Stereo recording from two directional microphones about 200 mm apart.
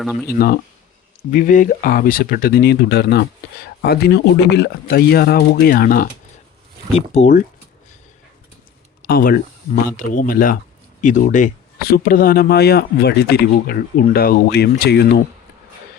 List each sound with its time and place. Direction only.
0.0 s speech: centre (ahead or behind)
0.3 s speech: 50° left (ahead or behind)
6.9 s speech: 35° left (ahead or behind)
9.0 s speech: 45° left (ahead or behind)